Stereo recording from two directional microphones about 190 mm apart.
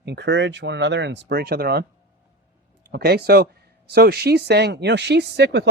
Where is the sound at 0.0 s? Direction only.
65° right (ahead or behind).